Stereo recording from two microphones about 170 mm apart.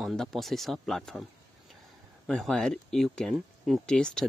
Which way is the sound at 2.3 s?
Centre (ahead or behind).